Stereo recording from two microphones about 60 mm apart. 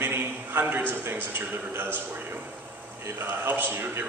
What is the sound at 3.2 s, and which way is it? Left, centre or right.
Speech, right.